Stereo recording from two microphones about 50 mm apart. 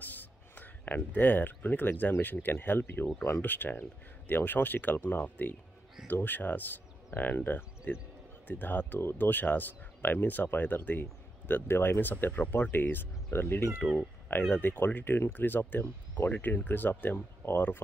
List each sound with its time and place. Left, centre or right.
0.0 s a sound: left
2.2 s speech: left
11.6 s speech: left